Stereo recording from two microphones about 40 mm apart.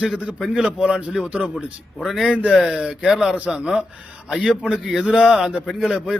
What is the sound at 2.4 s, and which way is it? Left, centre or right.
Speech, right.